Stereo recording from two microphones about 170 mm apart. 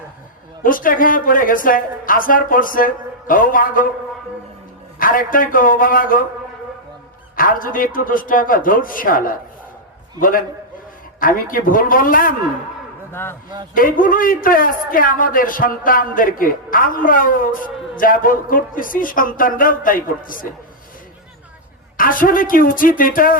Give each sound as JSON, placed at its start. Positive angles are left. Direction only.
{"t": 0.6, "sound": "a woman's voice", "side_deg": 55}
{"t": 4.9, "sound": "a man's voice", "side_deg": 55}
{"t": 7.3, "sound": "a man's voice", "side_deg": 55}
{"t": 13.7, "sound": "a man's voice", "side_deg": 55}
{"t": 21.9, "sound": "a man's voice", "side_deg": 55}